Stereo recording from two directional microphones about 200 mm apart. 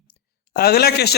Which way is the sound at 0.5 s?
50° left (ahead or behind).